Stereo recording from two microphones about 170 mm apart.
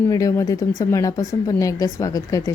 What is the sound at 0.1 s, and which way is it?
Speech, 20° left (ahead or behind).